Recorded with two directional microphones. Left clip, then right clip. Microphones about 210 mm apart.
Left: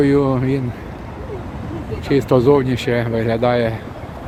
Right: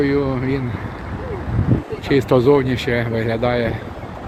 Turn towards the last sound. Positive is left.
turn(degrees=20)  # may be behind; listen again after turning